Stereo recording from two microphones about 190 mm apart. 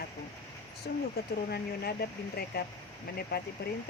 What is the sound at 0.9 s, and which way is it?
Speech, 55° left (ahead or behind).